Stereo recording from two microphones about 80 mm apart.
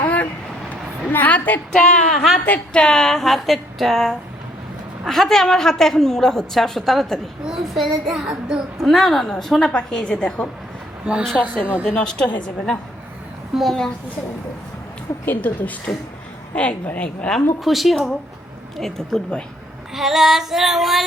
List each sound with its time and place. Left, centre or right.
1.1 s a woman's voice: left
1.7 s a woman's voice: centre
11.0 s a woman's voice: centre
11.9 s a woman's voice: centre
13.5 s a woman's voice: centre
15.3 s a woman's voice: left
17.6 s a woman's voice: centre
19.9 s a woman's voice: centre